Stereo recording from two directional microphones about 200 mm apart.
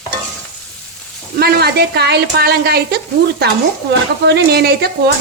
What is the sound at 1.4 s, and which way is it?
A woman's voice, 50° right (ahead or behind).